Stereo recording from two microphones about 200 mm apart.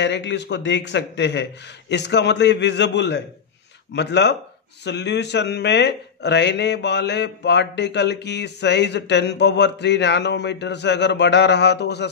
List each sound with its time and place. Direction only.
0.0 s a man's voice: 60° left (ahead or behind)